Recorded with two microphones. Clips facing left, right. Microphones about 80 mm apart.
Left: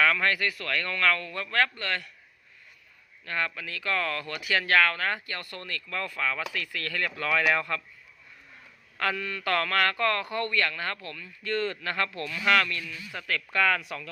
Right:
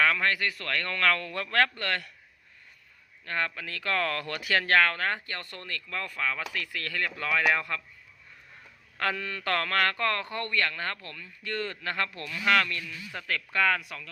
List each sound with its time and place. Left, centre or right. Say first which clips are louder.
0.0 s a man's voice: left 1 dB; right
3.2 s speech: even; right; by 7.8 s centre
9.0 s speech: left 1 dB; right
13.8 s speech: left 5 dB; centre